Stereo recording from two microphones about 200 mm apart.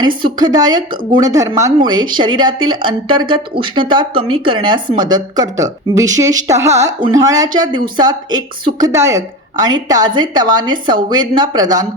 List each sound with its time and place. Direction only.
0.2 s a woman's voice: 20° right (ahead or behind)